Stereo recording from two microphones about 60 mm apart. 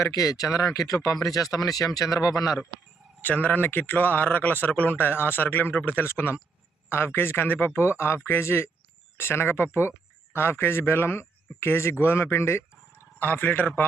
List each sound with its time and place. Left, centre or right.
0.0 s speech: left
3.2 s a man's voice: left
13.1 s a man's voice: left